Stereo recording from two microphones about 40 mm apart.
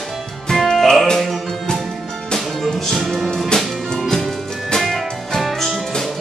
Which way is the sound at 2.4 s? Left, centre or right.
Centre.